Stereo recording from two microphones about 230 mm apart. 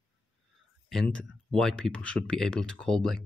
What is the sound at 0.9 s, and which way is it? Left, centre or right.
Speech, centre.